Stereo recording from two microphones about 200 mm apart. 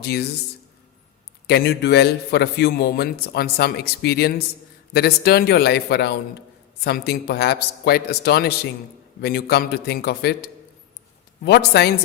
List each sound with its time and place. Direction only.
0.0 s a man's voice: 55° left (ahead or behind)
1.5 s a man's voice: 55° left (ahead or behind)